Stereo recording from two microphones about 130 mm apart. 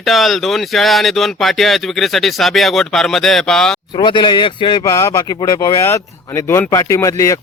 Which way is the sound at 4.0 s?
35° left (ahead or behind).